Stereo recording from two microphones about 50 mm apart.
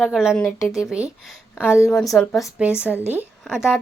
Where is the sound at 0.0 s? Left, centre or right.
Centre.